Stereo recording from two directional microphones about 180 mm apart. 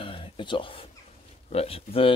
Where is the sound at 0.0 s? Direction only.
30° left (ahead or behind).